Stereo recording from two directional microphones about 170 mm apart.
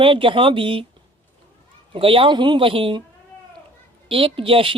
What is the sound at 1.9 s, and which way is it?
Speech, 30° right (ahead or behind).